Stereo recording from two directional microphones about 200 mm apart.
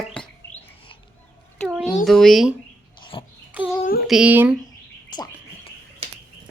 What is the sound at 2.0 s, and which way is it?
Speech, centre (ahead or behind).